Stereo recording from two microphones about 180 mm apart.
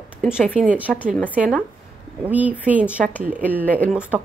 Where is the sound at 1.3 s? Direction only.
10° right (ahead or behind).